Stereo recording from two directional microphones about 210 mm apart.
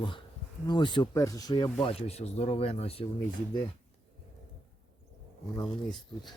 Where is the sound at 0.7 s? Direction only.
20° left (ahead or behind).